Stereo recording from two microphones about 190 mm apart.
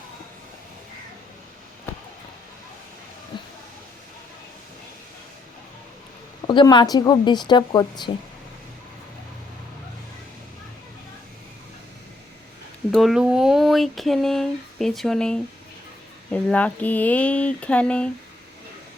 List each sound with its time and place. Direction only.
3.3 s a sound: 25° left (ahead or behind)
6.5 s speech: 25° left (ahead or behind)
12.9 s speech: centre (ahead or behind)